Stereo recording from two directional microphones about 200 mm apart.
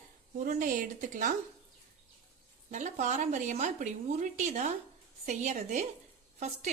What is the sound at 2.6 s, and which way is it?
A woman's voice, 35° right (ahead or behind).